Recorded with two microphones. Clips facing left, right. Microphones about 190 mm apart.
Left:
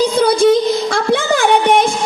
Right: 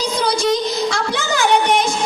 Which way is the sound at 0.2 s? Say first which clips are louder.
Left 6 dB; 55° left (ahead or behind).